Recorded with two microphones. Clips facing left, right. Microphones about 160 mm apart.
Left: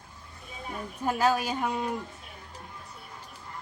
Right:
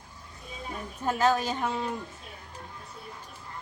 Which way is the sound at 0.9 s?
10° left (ahead or behind).